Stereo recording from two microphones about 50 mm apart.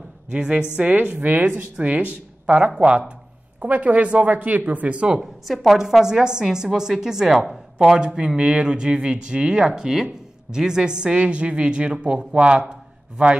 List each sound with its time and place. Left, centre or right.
0.3 s a woman's voice: centre
0.8 s a woman's voice: right
5.2 s a woman's voice: centre